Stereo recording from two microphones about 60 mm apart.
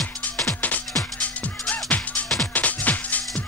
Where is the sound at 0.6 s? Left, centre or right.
Left.